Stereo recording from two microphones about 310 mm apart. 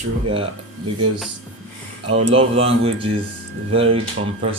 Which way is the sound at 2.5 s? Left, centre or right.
Centre.